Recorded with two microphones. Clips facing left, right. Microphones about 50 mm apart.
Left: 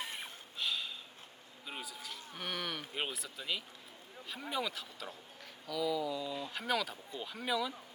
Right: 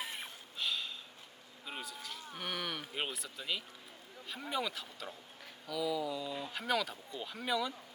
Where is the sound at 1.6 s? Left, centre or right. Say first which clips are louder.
Right 1 dB; centre.